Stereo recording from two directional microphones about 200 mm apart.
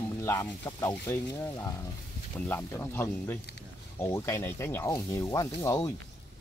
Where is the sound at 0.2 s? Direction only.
15° left (ahead or behind).